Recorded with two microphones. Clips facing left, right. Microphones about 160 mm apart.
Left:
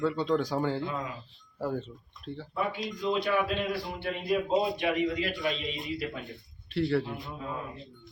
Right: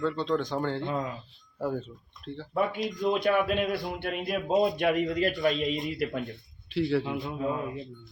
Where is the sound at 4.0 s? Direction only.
55° right (ahead or behind).